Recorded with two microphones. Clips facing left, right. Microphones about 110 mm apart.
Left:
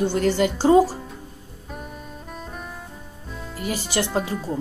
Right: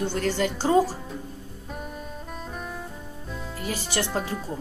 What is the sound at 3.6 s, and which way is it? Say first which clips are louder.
Speech: left 4 dB; 10° left (ahead or behind).